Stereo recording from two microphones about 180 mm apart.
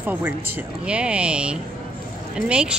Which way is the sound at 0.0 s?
10° right (ahead or behind).